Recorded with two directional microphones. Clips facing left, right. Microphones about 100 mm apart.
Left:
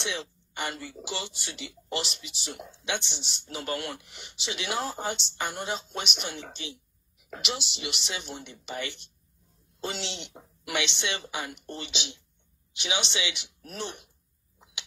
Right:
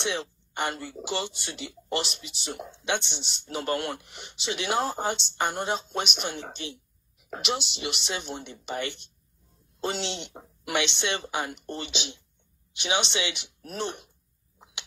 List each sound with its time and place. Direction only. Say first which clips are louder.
0.0 s speech: right 4 dB; 40° right (ahead or behind)